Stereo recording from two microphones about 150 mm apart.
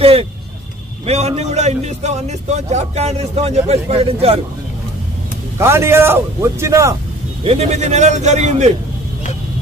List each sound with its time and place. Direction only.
0.0 s a man's voice: 40° right (ahead or behind)
5.6 s speech: 15° right (ahead or behind)
7.4 s a man's voice: 45° right (ahead or behind)